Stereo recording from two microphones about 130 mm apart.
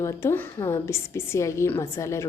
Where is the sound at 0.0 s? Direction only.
20° left (ahead or behind).